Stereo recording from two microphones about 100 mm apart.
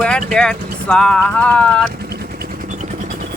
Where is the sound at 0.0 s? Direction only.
5° left (ahead or behind).